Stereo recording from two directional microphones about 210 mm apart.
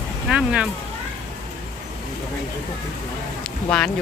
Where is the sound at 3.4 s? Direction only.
5° left (ahead or behind).